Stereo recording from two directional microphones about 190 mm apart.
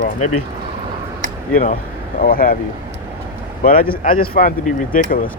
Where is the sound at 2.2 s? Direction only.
50° left (ahead or behind).